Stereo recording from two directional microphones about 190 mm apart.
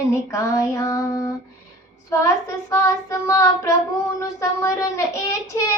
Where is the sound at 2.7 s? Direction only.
15° left (ahead or behind).